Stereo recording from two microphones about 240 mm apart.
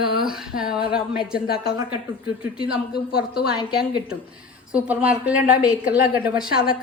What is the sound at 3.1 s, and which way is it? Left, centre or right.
Speech, left.